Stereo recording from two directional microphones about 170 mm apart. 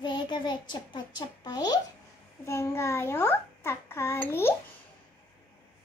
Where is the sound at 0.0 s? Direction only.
25° left (ahead or behind).